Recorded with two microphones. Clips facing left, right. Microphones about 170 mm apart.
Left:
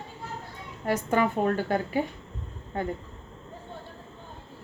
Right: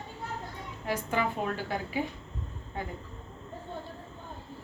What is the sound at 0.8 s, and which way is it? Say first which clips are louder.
A woman's voice: left 6 dB; 45° left (ahead or behind).